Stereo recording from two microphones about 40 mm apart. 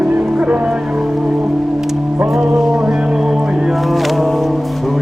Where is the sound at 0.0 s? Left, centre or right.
Right.